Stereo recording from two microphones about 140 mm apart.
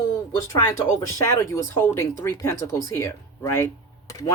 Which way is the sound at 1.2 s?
20° left (ahead or behind).